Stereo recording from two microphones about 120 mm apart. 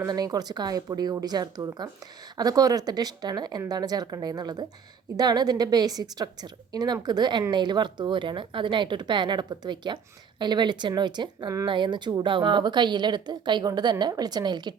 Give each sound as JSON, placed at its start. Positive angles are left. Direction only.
{"t": 0.0, "sound": "speech", "side_deg": -30}